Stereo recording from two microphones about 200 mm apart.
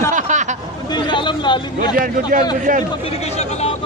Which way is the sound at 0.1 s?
35° right (ahead or behind).